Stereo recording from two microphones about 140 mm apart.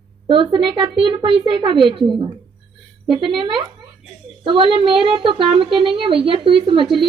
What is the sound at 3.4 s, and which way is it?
A woman's voice, 35° right (ahead or behind).